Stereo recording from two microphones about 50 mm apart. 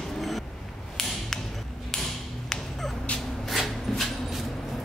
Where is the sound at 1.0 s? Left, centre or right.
Centre.